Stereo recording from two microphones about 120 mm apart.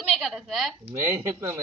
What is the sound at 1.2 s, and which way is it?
Speech, 25° right (ahead or behind).